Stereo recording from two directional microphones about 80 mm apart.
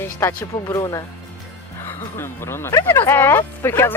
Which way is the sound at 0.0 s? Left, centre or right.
Left.